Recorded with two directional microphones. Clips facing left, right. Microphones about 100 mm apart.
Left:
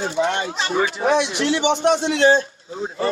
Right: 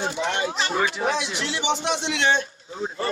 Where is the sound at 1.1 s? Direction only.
60° left (ahead or behind); by 2.4 s 35° left (ahead or behind).